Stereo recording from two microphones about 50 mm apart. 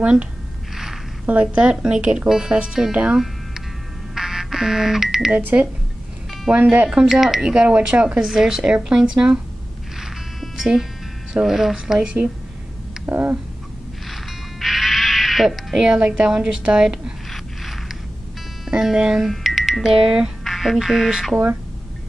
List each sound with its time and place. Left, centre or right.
1.2 s a woman's voice: right
4.1 s music: centre
5.3 s speech: right
7.1 s speech: centre
7.5 s a woman's voice: right
8.2 s speech: centre
9.9 s music: centre
11.4 s speech: centre
11.7 s speech: centre
13.0 s speech: right
14.0 s music: centre
18.7 s speech: centre
19.2 s speech: centre
20.4 s speech: centre